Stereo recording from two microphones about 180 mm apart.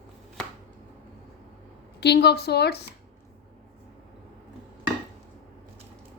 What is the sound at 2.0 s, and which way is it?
Speech, 65° left (ahead or behind).